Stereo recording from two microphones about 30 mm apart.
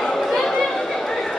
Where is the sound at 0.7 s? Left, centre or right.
Centre.